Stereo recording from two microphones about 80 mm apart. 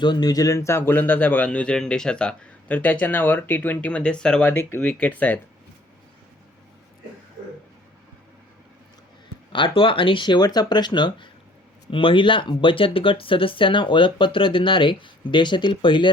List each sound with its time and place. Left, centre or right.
0.0 s speech: left; by 5.4 s centre
9.5 s speech: left